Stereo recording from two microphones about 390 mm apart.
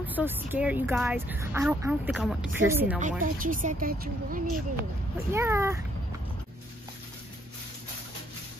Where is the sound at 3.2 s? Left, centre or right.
Right.